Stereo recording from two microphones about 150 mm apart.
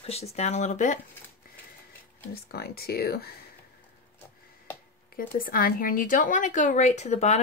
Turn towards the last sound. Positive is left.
turn(degrees=50)  # may be behind; listen again after turning